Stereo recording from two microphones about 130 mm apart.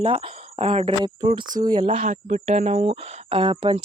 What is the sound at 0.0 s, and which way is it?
Speech, 40° right (ahead or behind).